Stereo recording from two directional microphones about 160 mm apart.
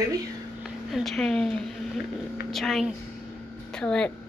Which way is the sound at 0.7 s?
Centre (ahead or behind).